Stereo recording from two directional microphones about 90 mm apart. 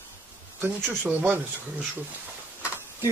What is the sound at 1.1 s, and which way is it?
Speech, 20° right (ahead or behind).